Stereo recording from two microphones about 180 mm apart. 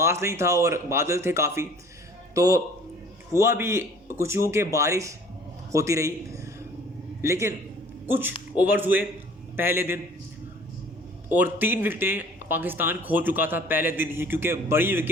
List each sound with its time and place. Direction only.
0.0 s a man's voice: 15° right (ahead or behind)
11.3 s speech: 10° right (ahead or behind)